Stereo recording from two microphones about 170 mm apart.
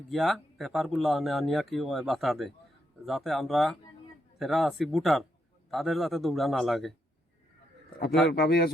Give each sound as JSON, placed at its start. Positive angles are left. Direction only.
{"t": 0.1, "sound": "speech", "side_deg": 0}
{"t": 8.3, "sound": "a man's voice", "side_deg": 65}